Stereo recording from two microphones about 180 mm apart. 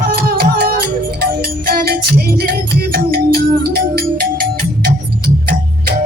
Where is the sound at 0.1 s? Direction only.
55° right (ahead or behind).